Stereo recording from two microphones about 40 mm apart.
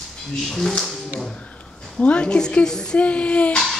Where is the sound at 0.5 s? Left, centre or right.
Centre.